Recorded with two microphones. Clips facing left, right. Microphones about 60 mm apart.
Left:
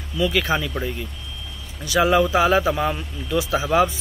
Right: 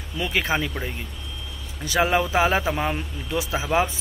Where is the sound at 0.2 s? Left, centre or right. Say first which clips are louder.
Left 3 dB; right.